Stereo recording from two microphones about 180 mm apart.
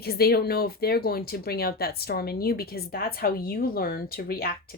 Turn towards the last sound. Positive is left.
turn(degrees=60)  # may be behind; listen again after turning